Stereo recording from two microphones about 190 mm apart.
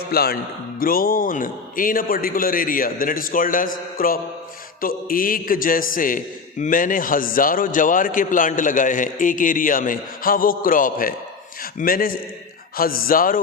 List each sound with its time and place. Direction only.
0.1 s a man's voice: 55° left (ahead or behind)